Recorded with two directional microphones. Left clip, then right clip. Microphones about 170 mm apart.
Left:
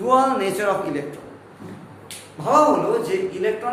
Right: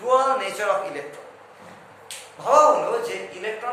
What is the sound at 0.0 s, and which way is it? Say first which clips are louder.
Speech: left 2 dB; 25° left (ahead or behind).